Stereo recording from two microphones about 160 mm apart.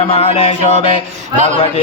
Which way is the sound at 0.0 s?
40° left (ahead or behind).